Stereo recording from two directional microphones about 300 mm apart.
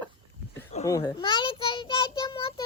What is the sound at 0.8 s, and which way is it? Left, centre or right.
A child's voice, centre.